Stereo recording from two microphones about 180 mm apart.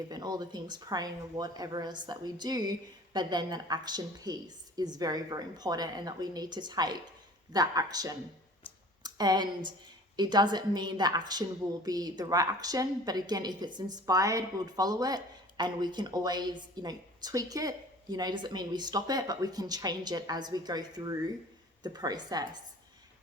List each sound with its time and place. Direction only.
0.1 s a woman's voice: 20° right (ahead or behind)